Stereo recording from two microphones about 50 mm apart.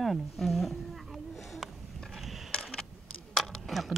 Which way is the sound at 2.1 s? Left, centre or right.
Centre.